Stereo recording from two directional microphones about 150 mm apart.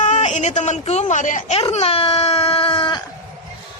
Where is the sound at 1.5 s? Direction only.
40° left (ahead or behind).